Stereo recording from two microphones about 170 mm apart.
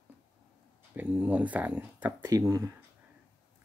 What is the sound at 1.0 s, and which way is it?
Speech, 10° right (ahead or behind).